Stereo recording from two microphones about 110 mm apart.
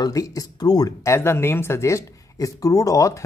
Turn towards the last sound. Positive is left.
turn(degrees=30)  # may be behind; listen again after turning